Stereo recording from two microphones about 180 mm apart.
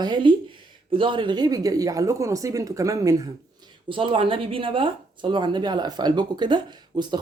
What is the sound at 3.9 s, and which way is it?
Speech, 30° right (ahead or behind).